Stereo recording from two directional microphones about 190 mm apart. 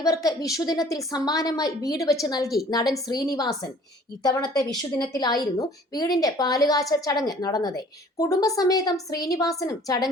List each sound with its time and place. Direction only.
0.0 s a woman's voice: 20° left (ahead or behind)